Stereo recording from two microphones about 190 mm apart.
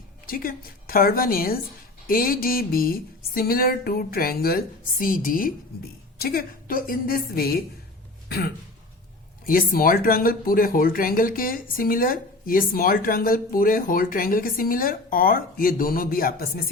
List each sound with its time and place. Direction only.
0.3 s speech: 50° left (ahead or behind)
9.5 s speech: 50° left (ahead or behind)